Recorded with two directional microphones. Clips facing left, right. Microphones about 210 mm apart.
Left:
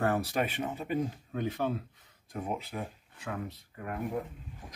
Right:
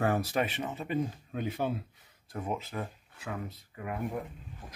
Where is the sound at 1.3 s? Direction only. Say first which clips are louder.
Left 1 dB; 15° right (ahead or behind).